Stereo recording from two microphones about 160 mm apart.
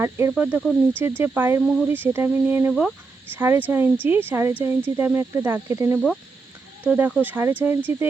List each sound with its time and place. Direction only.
0.0 s speech: 15° right (ahead or behind)